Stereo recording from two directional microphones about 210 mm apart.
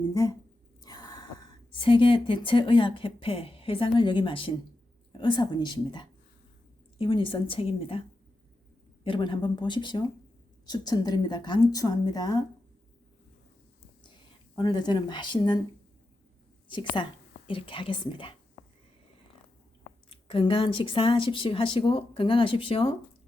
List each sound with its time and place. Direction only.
0.1 s speech: 15° left (ahead or behind)
0.8 s a sound: 20° left (ahead or behind)
1.7 s speech: 25° left (ahead or behind)
9.0 s speech: 25° left (ahead or behind)
14.0 s speech: 20° left (ahead or behind)
16.7 s speech: 20° left (ahead or behind)
20.1 s speech: 25° left (ahead or behind)